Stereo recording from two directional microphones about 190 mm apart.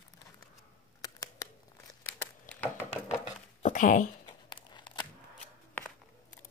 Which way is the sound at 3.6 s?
45° left (ahead or behind).